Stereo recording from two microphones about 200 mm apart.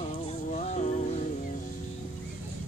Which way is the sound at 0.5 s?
35° left (ahead or behind).